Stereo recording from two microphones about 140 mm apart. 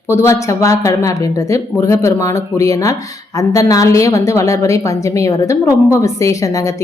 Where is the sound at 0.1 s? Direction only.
20° left (ahead or behind).